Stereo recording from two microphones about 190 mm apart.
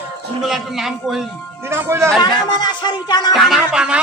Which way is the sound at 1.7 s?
15° right (ahead or behind).